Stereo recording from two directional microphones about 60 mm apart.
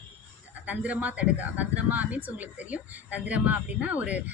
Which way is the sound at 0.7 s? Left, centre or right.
Right.